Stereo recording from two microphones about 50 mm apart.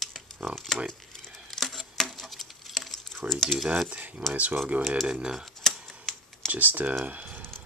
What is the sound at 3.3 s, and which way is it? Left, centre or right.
Speech, centre.